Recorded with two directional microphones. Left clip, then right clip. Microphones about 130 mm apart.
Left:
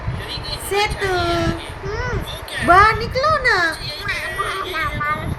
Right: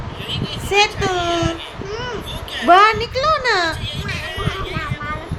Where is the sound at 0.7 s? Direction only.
15° right (ahead or behind).